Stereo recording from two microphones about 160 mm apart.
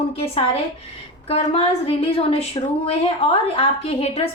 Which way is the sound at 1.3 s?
40° left (ahead or behind).